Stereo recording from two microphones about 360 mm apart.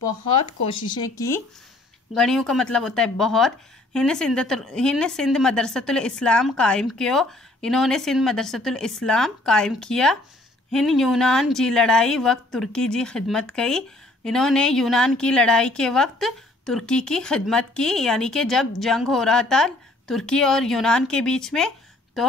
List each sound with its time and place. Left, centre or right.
0.7 s a woman's voice: centre